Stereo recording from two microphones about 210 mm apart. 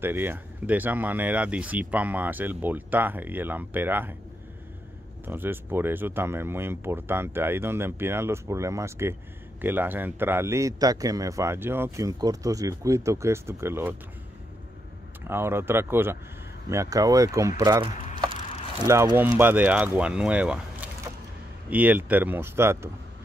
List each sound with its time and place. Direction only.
0.0 s a man's voice: 10° right (ahead or behind)
5.2 s a man's voice: 10° right (ahead or behind)
15.2 s a man's voice: 10° right (ahead or behind)
21.6 s a man's voice: 10° right (ahead or behind)